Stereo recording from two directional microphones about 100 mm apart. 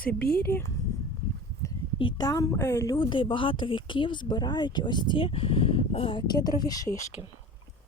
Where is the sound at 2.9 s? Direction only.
50° left (ahead or behind); by 6.2 s 70° left (ahead or behind).